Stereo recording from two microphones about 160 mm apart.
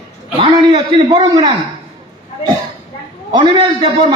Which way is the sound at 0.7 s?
25° right (ahead or behind).